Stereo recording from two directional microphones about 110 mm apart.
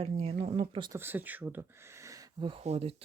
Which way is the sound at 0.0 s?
65° right (ahead or behind).